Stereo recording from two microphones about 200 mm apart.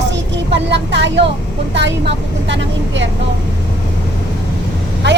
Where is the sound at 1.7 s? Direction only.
60° right (ahead or behind).